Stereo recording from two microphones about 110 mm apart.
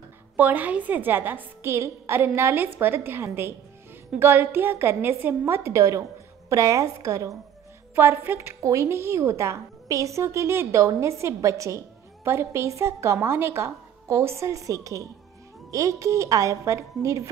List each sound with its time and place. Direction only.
0.4 s a woman's voice: 15° right (ahead or behind)